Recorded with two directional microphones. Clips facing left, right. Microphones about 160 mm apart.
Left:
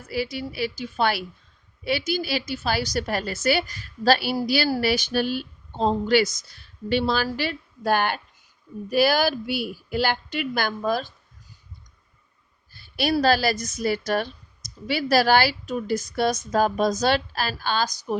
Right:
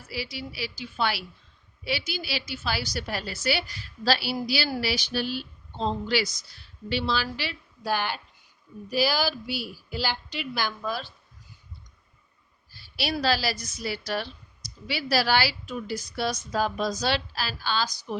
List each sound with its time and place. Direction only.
0.1 s a woman's voice: 50° left (ahead or behind)
12.7 s a sound: 50° left (ahead or behind)
13.1 s a woman's voice: 50° left (ahead or behind)